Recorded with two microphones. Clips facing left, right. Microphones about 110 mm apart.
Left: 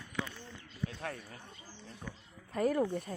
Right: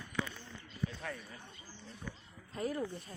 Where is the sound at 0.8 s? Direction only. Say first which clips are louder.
Left 1 dB; 60° left (ahead or behind).